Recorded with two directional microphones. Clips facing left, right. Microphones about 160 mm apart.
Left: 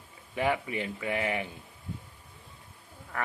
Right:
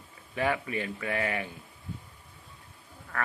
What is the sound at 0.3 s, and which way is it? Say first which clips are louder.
Speech: even; 20° left (ahead or behind).